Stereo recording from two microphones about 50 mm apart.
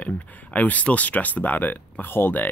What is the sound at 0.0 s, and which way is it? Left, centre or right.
Speech, left.